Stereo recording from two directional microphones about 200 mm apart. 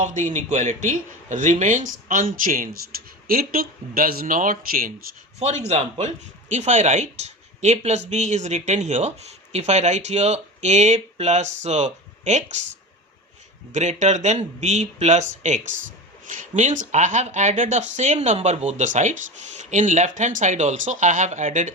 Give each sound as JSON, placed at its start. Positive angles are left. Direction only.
{"t": 0.0, "sound": "speech", "side_deg": -40}
{"t": 13.7, "sound": "speech", "side_deg": -35}